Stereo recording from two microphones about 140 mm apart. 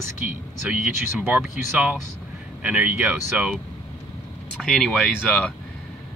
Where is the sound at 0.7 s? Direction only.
10° right (ahead or behind).